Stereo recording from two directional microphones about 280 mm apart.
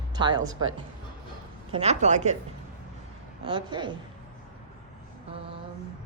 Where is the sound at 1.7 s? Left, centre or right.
Right.